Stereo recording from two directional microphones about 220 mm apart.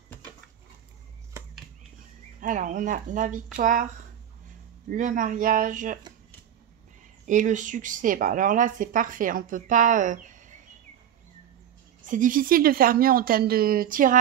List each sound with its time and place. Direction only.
2.4 s speech: 35° right (ahead or behind)
7.2 s speech: 35° right (ahead or behind)
12.0 s speech: 35° right (ahead or behind)